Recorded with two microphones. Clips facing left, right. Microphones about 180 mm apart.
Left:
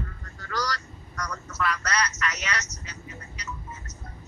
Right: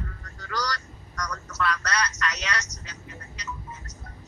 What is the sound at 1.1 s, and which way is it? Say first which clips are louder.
Telephone: right 1 dB; 10° left (ahead or behind).